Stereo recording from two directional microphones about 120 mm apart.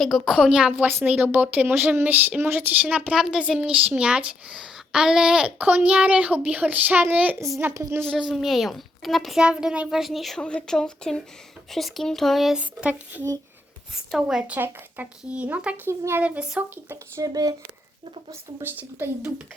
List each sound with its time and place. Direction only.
0.0 s a woman's voice: centre (ahead or behind)
3.1 s a woman's voice: 5° right (ahead or behind); by 8.0 s 25° right (ahead or behind)
8.0 s a woman's voice: centre (ahead or behind)
17.2 s speech: 30° right (ahead or behind)
18.3 s speech: 15° right (ahead or behind)